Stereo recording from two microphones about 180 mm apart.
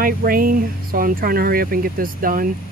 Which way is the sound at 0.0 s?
55° right (ahead or behind).